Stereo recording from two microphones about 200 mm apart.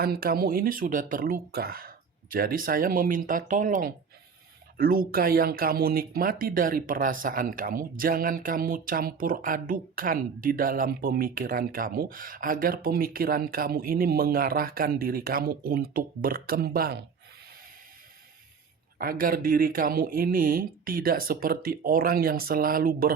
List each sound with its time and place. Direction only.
0.0 s speech: 50° right (ahead or behind)
18.9 s speech: 45° right (ahead or behind)